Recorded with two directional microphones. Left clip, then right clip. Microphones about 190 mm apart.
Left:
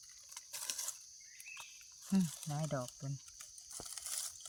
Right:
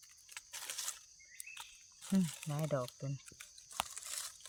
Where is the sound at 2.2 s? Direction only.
40° right (ahead or behind).